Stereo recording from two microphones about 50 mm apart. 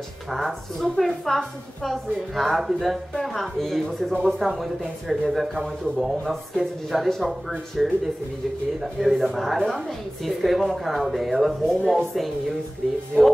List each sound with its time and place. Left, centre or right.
0.3 s a woman's voice: centre
12.8 s speech: centre